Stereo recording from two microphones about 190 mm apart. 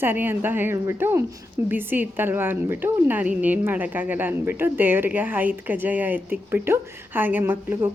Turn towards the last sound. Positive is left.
turn(degrees=-10)  # may be behind; listen again after turning